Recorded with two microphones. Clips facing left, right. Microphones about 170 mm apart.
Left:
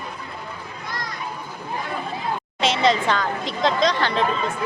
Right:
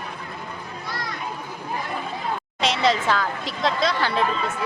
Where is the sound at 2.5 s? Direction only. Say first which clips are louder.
Left 2 dB; centre (ahead or behind).